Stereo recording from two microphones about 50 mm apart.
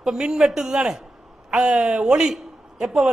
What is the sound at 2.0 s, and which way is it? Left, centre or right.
A man's voice, centre.